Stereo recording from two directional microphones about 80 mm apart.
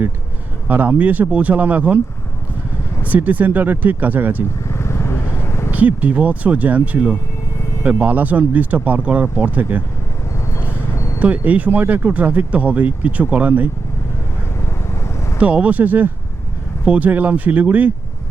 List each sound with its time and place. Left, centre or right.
0.7 s speech: centre
3.0 s speech: centre
4.7 s vehicle: left
5.7 s speech: centre
10.6 s vehicle: left
11.2 s speech: centre
15.4 s speech: centre